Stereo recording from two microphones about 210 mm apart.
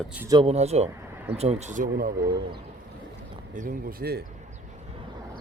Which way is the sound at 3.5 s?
50° right (ahead or behind).